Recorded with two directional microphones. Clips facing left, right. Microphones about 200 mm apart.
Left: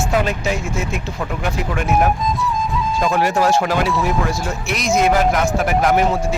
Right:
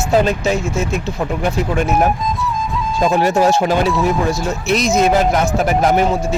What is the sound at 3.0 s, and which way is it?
Speech, 25° right (ahead or behind).